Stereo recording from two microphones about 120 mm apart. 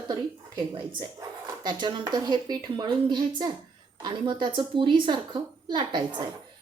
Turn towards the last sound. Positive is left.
turn(degrees=-35)  # may be behind; listen again after turning